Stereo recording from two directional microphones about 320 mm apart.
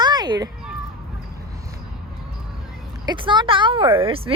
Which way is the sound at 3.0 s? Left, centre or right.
Centre.